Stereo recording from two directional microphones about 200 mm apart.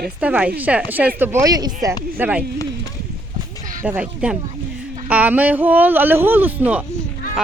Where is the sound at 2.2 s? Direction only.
5° right (ahead or behind).